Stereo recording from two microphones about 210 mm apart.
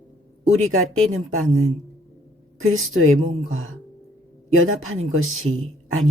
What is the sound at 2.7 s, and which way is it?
Speech, 75° right (ahead or behind).